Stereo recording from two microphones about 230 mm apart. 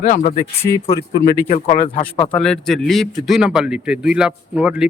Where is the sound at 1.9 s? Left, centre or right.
Left.